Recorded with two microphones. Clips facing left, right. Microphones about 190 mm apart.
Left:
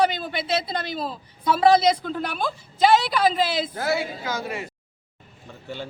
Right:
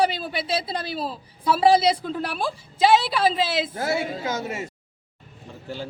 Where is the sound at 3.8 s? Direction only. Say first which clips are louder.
Even; 25° right (ahead or behind).